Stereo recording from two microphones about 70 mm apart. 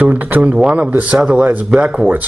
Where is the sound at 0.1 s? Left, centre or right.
Right.